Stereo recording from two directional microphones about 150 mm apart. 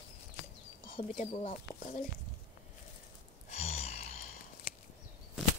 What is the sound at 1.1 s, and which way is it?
Speech, 50° left (ahead or behind).